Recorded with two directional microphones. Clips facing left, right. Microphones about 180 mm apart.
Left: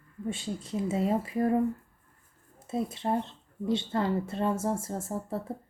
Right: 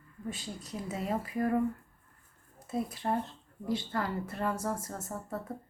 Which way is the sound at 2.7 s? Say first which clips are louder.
Left 3 dB; 25° left (ahead or behind).